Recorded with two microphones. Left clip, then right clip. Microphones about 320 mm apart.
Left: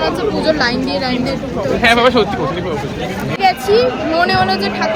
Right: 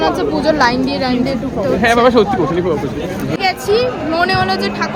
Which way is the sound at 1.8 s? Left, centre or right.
Right.